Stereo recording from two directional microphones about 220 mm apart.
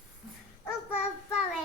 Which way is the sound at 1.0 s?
5° right (ahead or behind).